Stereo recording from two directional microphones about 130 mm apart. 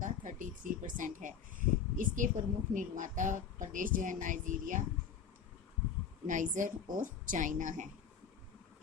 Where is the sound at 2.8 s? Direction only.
80° right.